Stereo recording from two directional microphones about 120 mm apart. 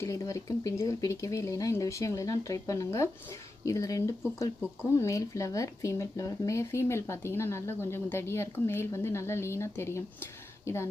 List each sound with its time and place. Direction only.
0.0 s speech: 25° left (ahead or behind)